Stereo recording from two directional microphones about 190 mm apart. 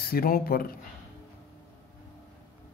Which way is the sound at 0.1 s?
50° left (ahead or behind).